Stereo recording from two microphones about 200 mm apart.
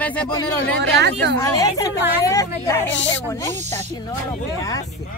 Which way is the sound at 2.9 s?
65° left (ahead or behind).